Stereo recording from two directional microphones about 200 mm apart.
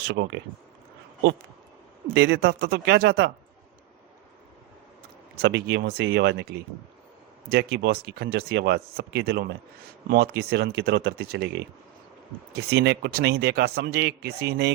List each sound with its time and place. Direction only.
0.0 s speech: 55° right (ahead or behind)
2.1 s a man's voice: 55° right (ahead or behind)
5.4 s a man's voice: 55° right (ahead or behind)